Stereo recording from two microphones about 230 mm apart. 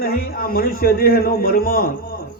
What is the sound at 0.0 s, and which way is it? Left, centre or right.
A man's voice, left.